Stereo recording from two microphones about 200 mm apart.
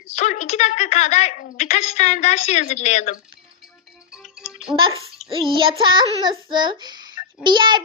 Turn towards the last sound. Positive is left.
turn(degrees=-20)  # may be behind; listen again after turning